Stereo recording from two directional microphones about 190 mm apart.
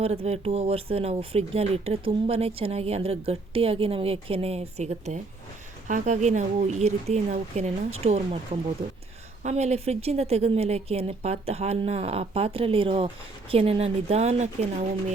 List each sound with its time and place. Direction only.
0.0 s a woman's voice: 30° right (ahead or behind)
9.4 s a woman's voice: 35° right (ahead or behind)